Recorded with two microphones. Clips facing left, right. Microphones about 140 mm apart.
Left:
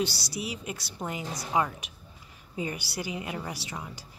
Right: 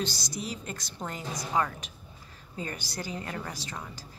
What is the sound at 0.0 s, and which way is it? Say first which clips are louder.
A woman's voice: left 3 dB; 10° left (ahead or behind).